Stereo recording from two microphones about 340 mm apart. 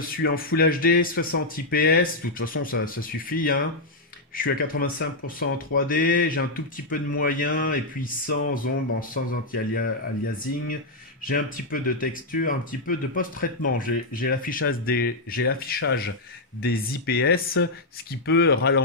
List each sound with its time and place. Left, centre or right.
0.2 s speech: left
9.1 s speech: left